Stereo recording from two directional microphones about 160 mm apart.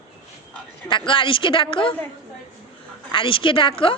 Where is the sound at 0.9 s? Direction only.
30° left (ahead or behind).